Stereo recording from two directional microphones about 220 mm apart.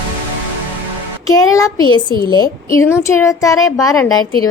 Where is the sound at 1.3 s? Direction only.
15° left (ahead or behind).